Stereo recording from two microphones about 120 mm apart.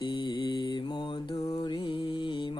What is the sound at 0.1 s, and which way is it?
Mantra, 40° left (ahead or behind).